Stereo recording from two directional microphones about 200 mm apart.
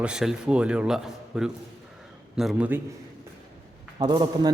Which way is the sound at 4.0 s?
20° right (ahead or behind).